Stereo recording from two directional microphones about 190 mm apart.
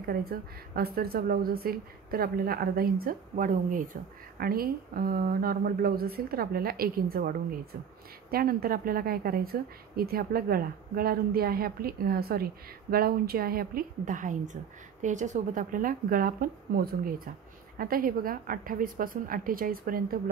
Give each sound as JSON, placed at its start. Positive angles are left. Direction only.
{"t": 0.0, "sound": "speech", "side_deg": -50}